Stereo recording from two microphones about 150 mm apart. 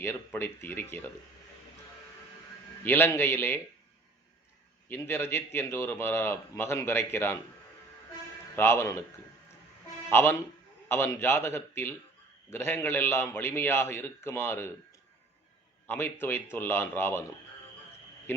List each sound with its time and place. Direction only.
0.3 s a man's voice: 15° left (ahead or behind)
2.8 s a man's voice: 15° left (ahead or behind)
4.9 s a man's voice: 15° left (ahead or behind)
8.5 s a man's voice: 15° left (ahead or behind)
10.1 s a man's voice: 15° left (ahead or behind)
15.9 s a man's voice: 15° left (ahead or behind)